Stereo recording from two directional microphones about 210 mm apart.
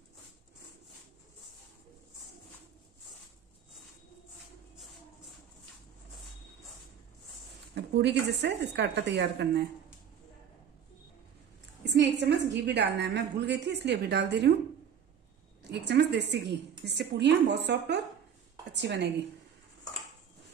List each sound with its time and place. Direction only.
7.7 s a woman's voice: 55° right (ahead or behind)
11.8 s a woman's voice: 55° right (ahead or behind)
15.7 s a woman's voice: 55° right (ahead or behind)